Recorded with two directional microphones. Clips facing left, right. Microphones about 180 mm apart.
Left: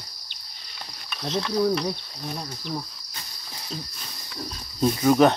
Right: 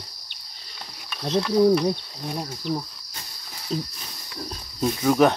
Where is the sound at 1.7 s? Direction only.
10° right (ahead or behind).